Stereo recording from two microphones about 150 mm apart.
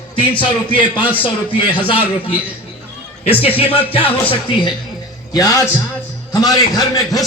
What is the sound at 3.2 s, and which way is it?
Speech, 40° left (ahead or behind).